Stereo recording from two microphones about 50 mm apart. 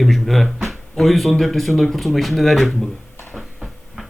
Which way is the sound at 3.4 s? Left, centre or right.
Centre.